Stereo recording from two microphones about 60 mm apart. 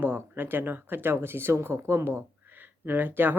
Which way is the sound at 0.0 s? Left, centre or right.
Right.